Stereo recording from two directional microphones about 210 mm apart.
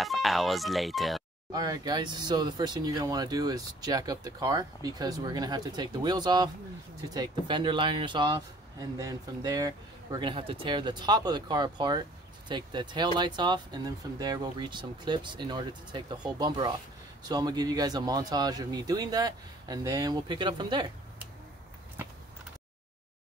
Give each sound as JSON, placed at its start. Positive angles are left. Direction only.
{"t": 0.0, "sound": "speech", "side_deg": 0}
{"t": 1.5, "sound": "speech", "side_deg": -20}